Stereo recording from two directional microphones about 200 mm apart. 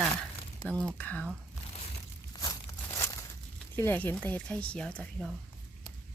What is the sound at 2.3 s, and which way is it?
Tearing, 20° left (ahead or behind).